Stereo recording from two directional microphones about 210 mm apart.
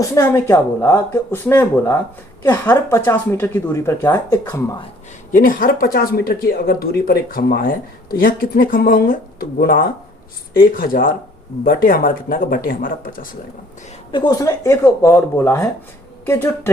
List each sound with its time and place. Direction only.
0.0 s speech: 15° left (ahead or behind)
5.3 s speech: 40° left (ahead or behind)
14.1 s speech: 20° left (ahead or behind)